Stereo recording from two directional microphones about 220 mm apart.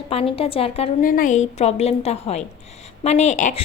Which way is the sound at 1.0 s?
35° left (ahead or behind).